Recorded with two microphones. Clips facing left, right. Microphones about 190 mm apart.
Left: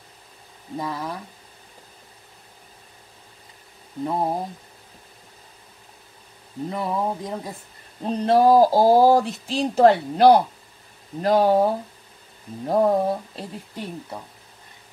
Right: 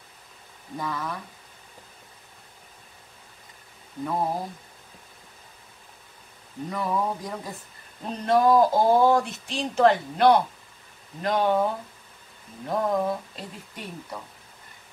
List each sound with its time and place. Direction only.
0.7 s speech: 25° left (ahead or behind)
4.0 s speech: 25° left (ahead or behind)
6.7 s speech: 25° left (ahead or behind)
8.0 s a sound: 35° left (ahead or behind)